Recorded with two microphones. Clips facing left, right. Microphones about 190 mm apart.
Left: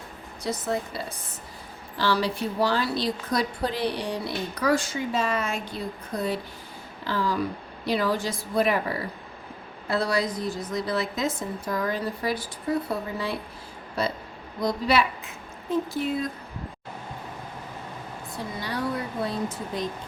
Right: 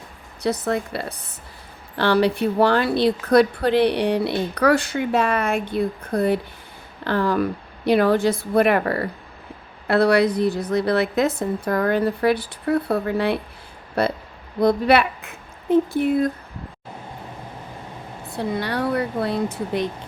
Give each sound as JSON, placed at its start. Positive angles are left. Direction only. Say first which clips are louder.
{"t": 0.4, "sound": "a woman's voice", "louder": "right 6 dB", "side_deg": -65}
{"t": 18.3, "sound": "a woman's voice", "louder": "right 9 dB", "side_deg": -65}